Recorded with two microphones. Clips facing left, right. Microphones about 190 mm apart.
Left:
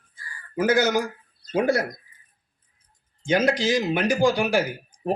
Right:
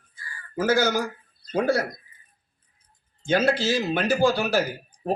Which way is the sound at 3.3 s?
15° left (ahead or behind).